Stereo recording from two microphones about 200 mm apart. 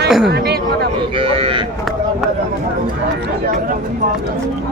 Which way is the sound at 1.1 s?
25° right (ahead or behind).